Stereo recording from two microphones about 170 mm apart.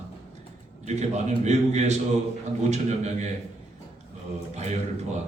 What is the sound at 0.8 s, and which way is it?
A man's voice, 40° right (ahead or behind).